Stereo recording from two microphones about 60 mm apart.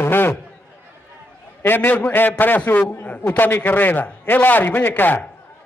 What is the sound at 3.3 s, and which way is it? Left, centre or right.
A man's voice, left.